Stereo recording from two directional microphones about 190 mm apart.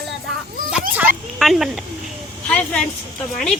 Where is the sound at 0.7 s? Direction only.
5° right (ahead or behind).